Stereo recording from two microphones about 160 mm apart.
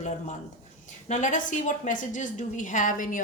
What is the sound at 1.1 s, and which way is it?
A woman's voice, 50° left (ahead or behind).